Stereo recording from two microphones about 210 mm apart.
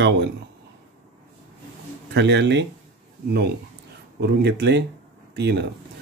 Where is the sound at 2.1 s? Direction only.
55° right (ahead or behind).